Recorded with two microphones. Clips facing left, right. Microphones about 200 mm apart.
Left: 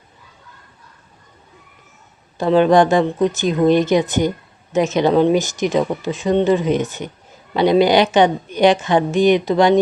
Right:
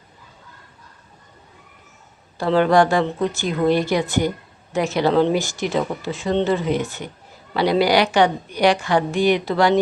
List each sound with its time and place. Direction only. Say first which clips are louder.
2.4 s a woman's voice: left 3 dB; 20° left (ahead or behind)